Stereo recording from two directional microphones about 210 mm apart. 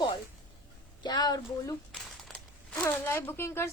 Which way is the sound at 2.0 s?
Centre (ahead or behind).